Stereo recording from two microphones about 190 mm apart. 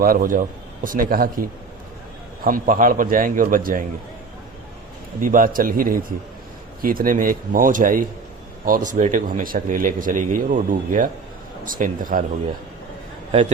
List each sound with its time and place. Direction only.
0.0 s speech: 50° right (ahead or behind)
5.2 s speech: 45° right (ahead or behind)